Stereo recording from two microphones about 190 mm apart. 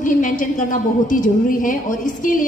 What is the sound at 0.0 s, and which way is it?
A woman's voice, 45° left (ahead or behind).